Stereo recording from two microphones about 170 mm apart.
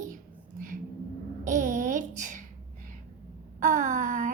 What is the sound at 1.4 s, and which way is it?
A woman's voice, 50° right (ahead or behind).